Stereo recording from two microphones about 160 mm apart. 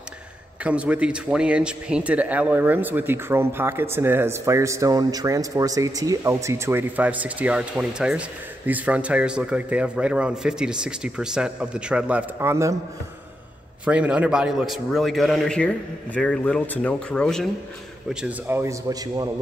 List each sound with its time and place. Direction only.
0.7 s speech: 10° right (ahead or behind)
13.8 s a man's voice: 5° right (ahead or behind)
18.2 s a man's voice: 15° right (ahead or behind)